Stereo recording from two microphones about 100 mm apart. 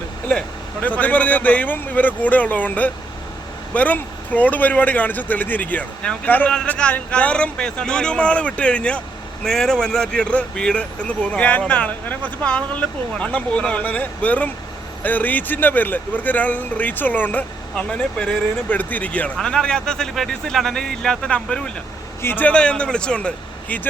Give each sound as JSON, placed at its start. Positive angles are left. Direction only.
{"t": 0.3, "sound": "speech", "side_deg": 15}
{"t": 22.2, "sound": "speech", "side_deg": 20}